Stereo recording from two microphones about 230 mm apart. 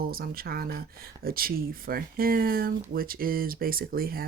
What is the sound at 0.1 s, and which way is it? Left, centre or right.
Speech, right.